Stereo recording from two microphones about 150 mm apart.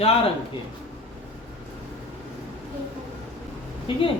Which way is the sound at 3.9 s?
35° left (ahead or behind).